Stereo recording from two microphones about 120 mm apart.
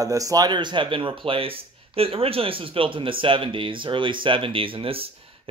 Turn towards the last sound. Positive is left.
turn(degrees=-50)  # may be behind; listen again after turning